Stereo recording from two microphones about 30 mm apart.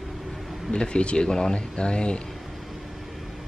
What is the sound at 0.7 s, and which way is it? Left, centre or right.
Speech, left.